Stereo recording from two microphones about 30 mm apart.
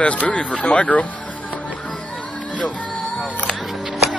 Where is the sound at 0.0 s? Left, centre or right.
Left.